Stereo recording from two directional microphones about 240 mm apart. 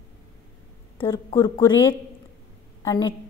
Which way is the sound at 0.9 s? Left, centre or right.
Centre.